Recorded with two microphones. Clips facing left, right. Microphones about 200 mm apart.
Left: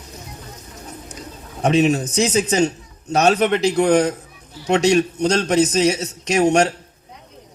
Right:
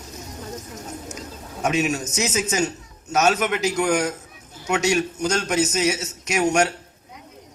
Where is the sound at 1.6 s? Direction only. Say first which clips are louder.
Left 6 dB; 30° left (ahead or behind).